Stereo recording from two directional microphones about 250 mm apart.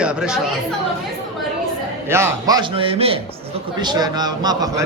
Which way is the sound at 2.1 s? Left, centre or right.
Centre.